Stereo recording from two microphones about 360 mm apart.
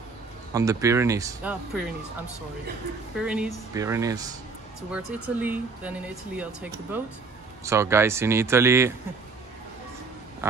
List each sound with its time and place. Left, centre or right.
0.5 s speech: centre
3.2 s speech: centre